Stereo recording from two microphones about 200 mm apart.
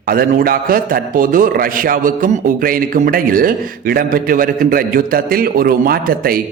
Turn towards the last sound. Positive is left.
turn(degrees=-45)  # may be behind; listen again after turning